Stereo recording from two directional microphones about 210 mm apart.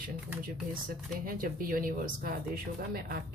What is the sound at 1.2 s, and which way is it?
Speech, 45° right (ahead or behind).